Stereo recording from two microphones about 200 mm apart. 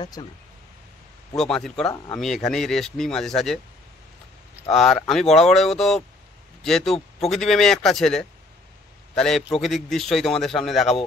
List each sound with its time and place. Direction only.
0.0 s speech: 20° left (ahead or behind)
1.3 s speech: centre (ahead or behind)
4.6 s a man's voice: centre (ahead or behind)